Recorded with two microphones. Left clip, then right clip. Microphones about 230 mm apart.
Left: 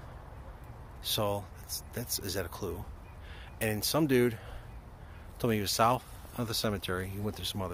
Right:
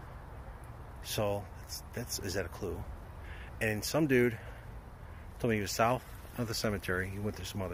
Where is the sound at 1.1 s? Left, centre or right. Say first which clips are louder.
Left 2 dB; left.